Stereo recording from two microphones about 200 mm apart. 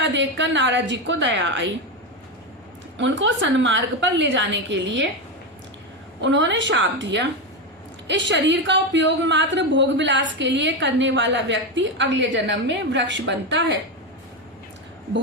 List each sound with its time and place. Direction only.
0.0 s a woman's voice: 65° right (ahead or behind)
3.0 s a woman's voice: 65° right (ahead or behind)
6.2 s a woman's voice: 65° right (ahead or behind)